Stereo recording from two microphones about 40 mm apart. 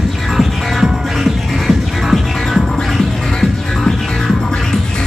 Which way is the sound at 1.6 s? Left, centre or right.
Centre.